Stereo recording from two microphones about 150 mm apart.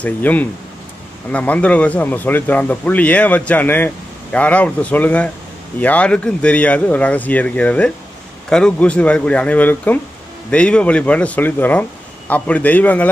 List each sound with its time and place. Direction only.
0.0 s speech: 10° left (ahead or behind)